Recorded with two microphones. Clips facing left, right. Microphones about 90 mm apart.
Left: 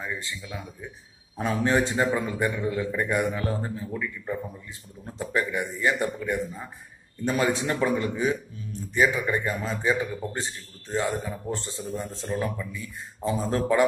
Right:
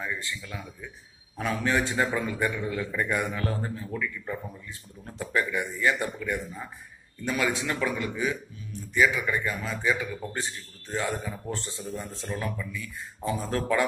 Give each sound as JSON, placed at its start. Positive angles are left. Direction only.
{"t": 0.0, "sound": "a man's voice", "side_deg": 20}
{"t": 1.4, "sound": "a man's voice", "side_deg": 30}
{"t": 7.2, "sound": "a man's voice", "side_deg": 35}